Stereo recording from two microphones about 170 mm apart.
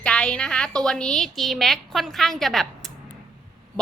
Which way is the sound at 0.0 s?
5° left (ahead or behind).